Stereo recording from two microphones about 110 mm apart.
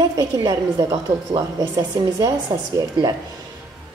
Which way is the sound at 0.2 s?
35° right (ahead or behind).